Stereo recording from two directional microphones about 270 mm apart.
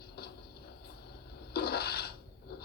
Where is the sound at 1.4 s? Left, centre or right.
Left.